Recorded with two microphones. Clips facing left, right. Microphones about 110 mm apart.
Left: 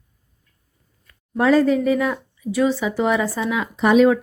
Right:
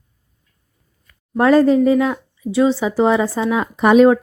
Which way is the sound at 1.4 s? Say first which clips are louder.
Right 3 dB; 45° right (ahead or behind).